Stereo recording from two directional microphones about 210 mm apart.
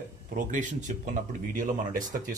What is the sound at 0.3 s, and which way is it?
Speech, 40° right (ahead or behind).